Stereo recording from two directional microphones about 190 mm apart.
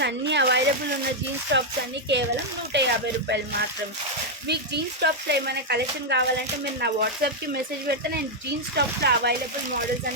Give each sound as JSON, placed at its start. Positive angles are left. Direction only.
{"t": 0.0, "sound": "speech", "side_deg": -65}
{"t": 4.4, "sound": "speech", "side_deg": -60}